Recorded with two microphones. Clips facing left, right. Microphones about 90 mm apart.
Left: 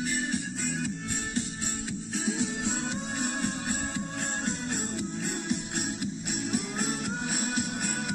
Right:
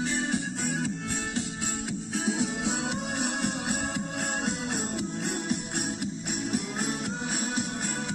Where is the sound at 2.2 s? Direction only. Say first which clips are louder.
Right 2 dB; 80° right.